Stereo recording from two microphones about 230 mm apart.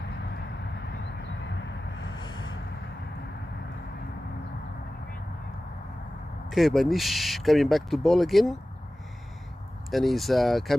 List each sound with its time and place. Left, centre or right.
2.1 s a sound: centre
6.5 s speech: centre
9.8 s speech: centre